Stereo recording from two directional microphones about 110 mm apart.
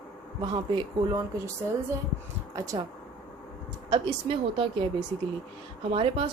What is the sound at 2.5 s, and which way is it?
Speech, 30° right (ahead or behind).